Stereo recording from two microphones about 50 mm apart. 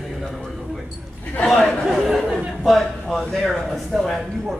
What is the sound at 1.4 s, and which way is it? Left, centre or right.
A man's voice, centre.